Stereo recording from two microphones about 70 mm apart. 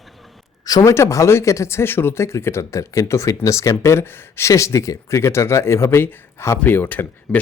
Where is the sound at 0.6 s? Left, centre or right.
Left.